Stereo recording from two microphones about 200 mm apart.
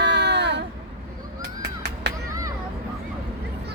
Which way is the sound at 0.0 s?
60° right (ahead or behind).